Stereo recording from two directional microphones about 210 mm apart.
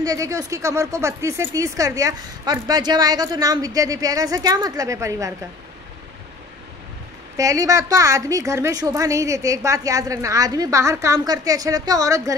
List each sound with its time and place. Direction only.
0.0 s speech: 15° right (ahead or behind)
7.3 s speech: 15° right (ahead or behind)